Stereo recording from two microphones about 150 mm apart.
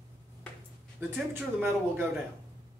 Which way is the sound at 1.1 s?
15° right (ahead or behind).